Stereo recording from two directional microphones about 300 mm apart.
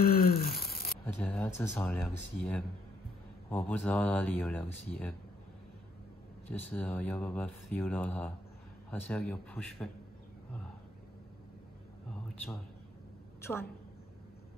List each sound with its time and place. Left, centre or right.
0.0 s a sound: left
1.0 s speech: centre
6.5 s speech: centre
13.4 s a woman's voice: centre